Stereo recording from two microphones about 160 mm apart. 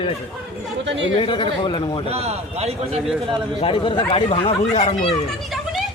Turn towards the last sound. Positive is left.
turn(degrees=35)  # may be behind; listen again after turning